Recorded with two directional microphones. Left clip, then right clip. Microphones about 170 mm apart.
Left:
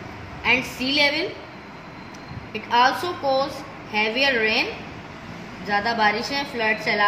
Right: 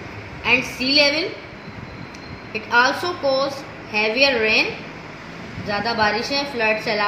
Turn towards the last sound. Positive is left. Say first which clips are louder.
# right 2 dB
turn(degrees=-10)  # may be behind; listen again after turning